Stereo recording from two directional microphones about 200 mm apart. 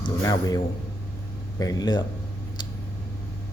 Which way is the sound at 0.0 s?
20° left (ahead or behind).